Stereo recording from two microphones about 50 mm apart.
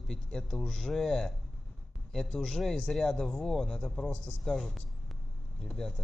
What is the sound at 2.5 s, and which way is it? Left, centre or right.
Speech, centre.